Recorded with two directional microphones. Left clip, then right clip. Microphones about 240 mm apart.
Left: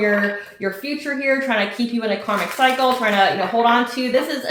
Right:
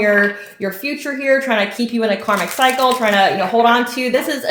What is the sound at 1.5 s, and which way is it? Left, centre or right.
Speech, right.